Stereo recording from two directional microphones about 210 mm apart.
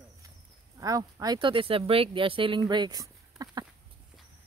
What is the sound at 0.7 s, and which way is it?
Speech, 15° right (ahead or behind).